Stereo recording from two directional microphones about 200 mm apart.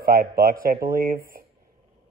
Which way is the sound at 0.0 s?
45° right (ahead or behind).